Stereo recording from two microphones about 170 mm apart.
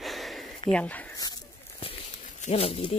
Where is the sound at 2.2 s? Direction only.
40° left (ahead or behind).